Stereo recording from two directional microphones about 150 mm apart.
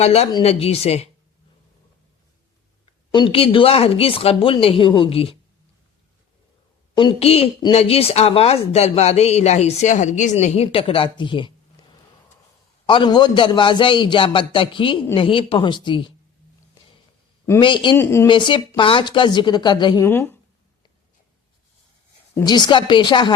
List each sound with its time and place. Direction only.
0.0 s speech: 45° left (ahead or behind)
2.8 s speech: 35° left (ahead or behind)
6.9 s speech: 35° left (ahead or behind)
12.8 s speech: 35° left (ahead or behind)
17.6 s speech: 35° left (ahead or behind)
17.9 s speech: 15° left (ahead or behind)
18.3 s speech: 35° left (ahead or behind)
20.1 s speech: 15° left (ahead or behind)
22.4 s speech: 30° left (ahead or behind)